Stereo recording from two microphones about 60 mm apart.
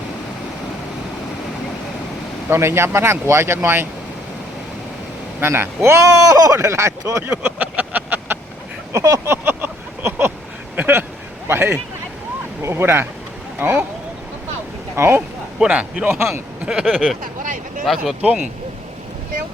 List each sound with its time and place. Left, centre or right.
2.5 s speech: right
5.4 s speech: right
7.3 s a sound: right
8.9 s vehicle: right
9.3 s a sound: right
10.8 s vehicle: right
11.4 s a sound: right
12.6 s speech: right
14.9 s speech: right
15.5 s a man's voice: right
16.1 s speech: right
16.6 s a man's voice: centre